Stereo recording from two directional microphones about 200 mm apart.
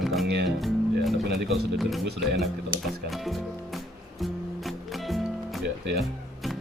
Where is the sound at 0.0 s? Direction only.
Centre (ahead or behind).